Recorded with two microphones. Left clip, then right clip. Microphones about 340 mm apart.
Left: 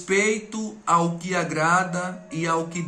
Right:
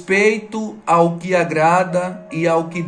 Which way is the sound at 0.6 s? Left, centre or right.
Centre.